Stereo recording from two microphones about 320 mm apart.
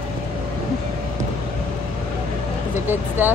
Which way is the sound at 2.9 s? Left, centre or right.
Centre.